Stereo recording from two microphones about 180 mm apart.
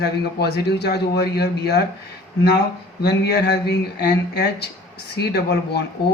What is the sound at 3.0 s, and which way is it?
Speech, 65° left (ahead or behind).